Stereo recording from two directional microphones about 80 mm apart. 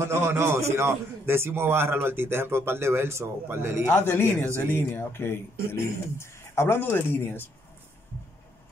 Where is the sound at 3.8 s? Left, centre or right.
Left.